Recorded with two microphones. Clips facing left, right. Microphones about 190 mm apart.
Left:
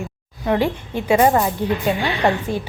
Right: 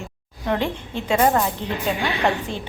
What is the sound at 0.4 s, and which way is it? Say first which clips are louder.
A woman's voice: left 4 dB; 10° left (ahead or behind).